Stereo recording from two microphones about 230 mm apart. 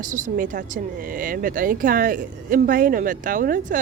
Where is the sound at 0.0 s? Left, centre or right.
Right.